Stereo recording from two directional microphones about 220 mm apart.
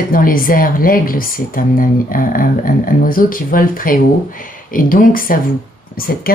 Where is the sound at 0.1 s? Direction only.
40° left (ahead or behind).